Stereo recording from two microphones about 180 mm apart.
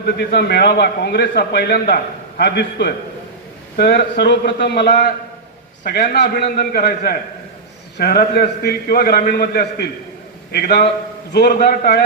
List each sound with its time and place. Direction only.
0.0 s a man's voice: 65° left (ahead or behind)